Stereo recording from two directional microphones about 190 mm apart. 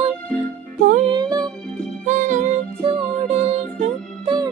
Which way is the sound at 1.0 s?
20° right (ahead or behind).